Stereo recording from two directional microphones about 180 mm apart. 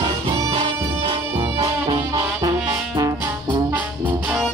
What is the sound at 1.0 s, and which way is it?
Music, 25° right (ahead or behind).